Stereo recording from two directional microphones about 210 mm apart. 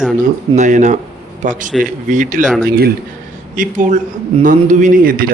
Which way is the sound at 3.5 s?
35° right (ahead or behind).